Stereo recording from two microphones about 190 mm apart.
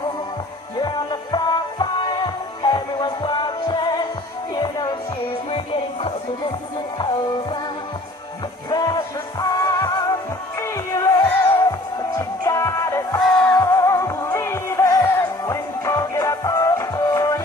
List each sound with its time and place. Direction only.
0.7 s music: 20° left (ahead or behind)
8.6 s music: 20° left (ahead or behind)